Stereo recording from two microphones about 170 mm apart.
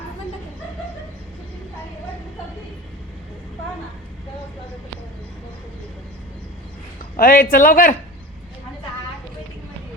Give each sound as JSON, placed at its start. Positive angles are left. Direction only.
{"t": 7.2, "sound": "speech", "side_deg": 55}